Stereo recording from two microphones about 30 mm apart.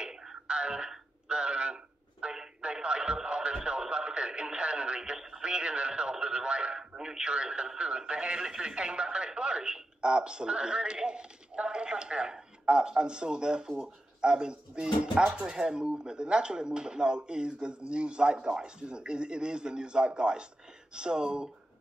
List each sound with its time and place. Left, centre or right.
0.5 s telephone: right
2.6 s radio: right
13.7 s speech: right